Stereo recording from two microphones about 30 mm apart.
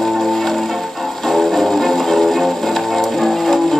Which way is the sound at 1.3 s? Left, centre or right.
Centre.